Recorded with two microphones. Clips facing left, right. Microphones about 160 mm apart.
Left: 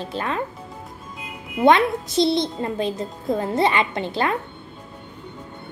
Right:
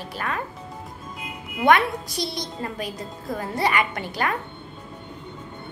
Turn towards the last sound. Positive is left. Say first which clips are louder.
# left 4 dB
turn(degrees=25)  # may be behind; listen again after turning